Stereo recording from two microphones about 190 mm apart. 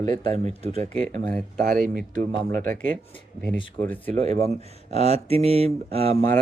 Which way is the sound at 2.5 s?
45° right (ahead or behind).